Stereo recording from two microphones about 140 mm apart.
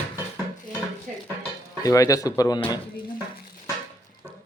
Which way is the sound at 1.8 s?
25° left (ahead or behind).